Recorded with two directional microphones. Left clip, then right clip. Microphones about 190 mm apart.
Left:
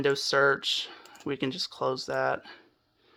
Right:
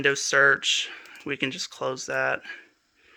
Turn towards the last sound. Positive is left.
turn(degrees=5)  # may be behind; listen again after turning